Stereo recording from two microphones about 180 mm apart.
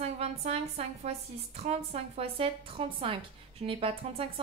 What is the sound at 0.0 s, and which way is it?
A woman's voice, 35° right (ahead or behind).